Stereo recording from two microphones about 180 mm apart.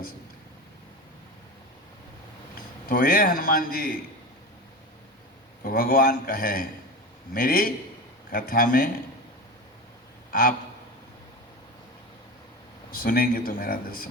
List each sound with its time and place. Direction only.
2.9 s speech: 55° left (ahead or behind)
5.6 s speech: 55° left (ahead or behind)
12.9 s speech: 55° left (ahead or behind)